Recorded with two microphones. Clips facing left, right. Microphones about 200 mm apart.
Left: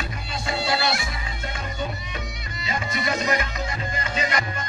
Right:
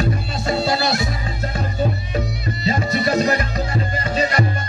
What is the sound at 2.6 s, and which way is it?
Music, 35° right (ahead or behind).